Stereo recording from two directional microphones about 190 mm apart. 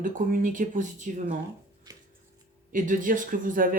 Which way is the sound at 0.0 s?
45° right (ahead or behind).